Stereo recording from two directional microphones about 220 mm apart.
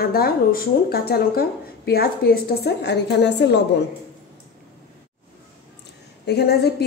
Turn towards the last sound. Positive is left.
turn(degrees=45)  # may be behind; listen again after turning